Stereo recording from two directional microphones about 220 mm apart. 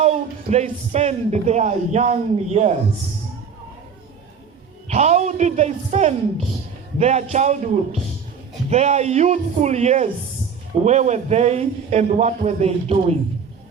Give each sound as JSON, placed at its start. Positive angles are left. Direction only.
{"t": 0.0, "sound": "speech", "side_deg": -30}
{"t": 4.9, "sound": "a man's voice", "side_deg": -30}
{"t": 8.7, "sound": "a man's voice", "side_deg": -30}